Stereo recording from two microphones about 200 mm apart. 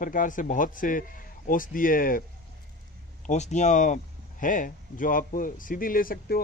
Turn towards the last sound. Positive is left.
turn(degrees=45)  # may be behind; listen again after turning